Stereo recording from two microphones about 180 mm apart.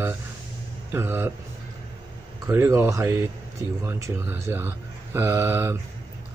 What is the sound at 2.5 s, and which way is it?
Speech, 15° right (ahead or behind).